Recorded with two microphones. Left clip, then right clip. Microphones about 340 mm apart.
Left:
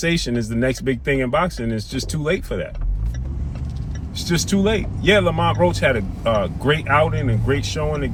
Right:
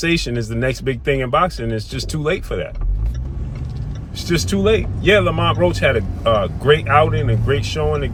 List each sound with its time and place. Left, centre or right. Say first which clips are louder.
0.2 s speech: even; centre
4.3 s speech: right 4 dB; centre